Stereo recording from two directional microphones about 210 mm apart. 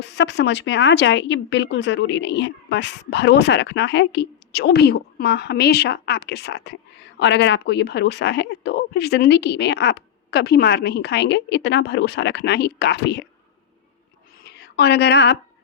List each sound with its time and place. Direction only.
0.0 s speech: 55° left (ahead or behind)
14.4 s a woman's voice: 50° left (ahead or behind)